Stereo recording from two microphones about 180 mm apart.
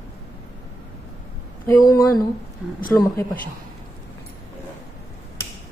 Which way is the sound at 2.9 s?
10° left (ahead or behind).